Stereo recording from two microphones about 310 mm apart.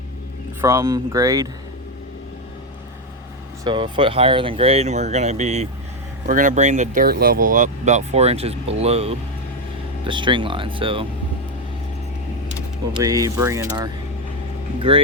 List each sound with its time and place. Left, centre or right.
0.6 s speech: centre
3.6 s speech: centre
12.5 s speech: centre